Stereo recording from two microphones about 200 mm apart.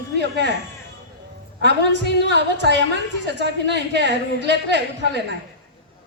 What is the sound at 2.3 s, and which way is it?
A woman's voice, 60° right (ahead or behind).